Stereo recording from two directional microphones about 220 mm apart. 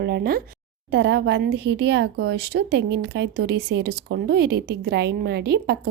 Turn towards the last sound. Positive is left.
turn(degrees=-45)  # may be behind; listen again after turning